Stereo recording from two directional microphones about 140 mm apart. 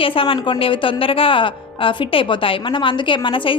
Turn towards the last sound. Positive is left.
turn(degrees=40)  # may be behind; listen again after turning